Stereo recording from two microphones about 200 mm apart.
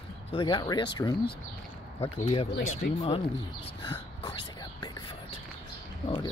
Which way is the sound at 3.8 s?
25° left (ahead or behind).